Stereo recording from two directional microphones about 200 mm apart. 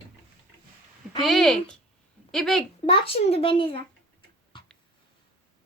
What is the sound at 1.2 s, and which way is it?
Speech, centre (ahead or behind).